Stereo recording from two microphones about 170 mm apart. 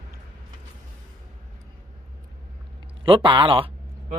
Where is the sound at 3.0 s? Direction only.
30° right (ahead or behind).